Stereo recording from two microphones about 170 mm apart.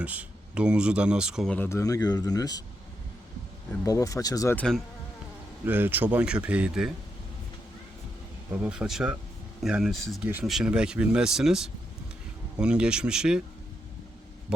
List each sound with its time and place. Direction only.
0.0 s speech: 10° right (ahead or behind)
1.5 s speech: 15° left (ahead or behind)
3.8 s speech: 20° left (ahead or behind)
4.5 s speech: 5° left (ahead or behind)
5.6 s speech: 10° right (ahead or behind)
8.6 s speech: 5° right (ahead or behind)